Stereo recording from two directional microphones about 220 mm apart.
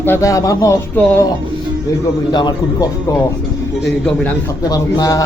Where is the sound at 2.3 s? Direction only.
20° left (ahead or behind).